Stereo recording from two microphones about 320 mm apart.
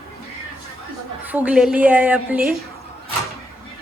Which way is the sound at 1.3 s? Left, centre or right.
Centre.